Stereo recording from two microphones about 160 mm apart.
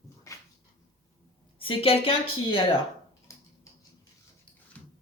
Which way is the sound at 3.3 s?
20° left (ahead or behind).